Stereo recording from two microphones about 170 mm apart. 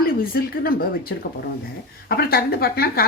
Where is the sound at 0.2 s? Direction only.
60° left (ahead or behind).